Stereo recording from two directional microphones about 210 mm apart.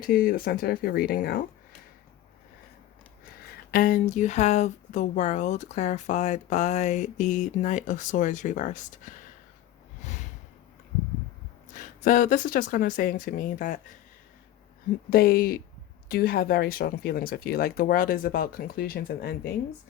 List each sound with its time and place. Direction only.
0.0 s speech: 45° left (ahead or behind)
3.7 s speech: 40° left (ahead or behind)
10.0 s snort: 35° left (ahead or behind)
11.7 s speech: 35° left (ahead or behind)
15.1 s speech: 45° left (ahead or behind)